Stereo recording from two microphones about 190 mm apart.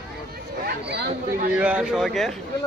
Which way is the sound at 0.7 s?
55° right (ahead or behind).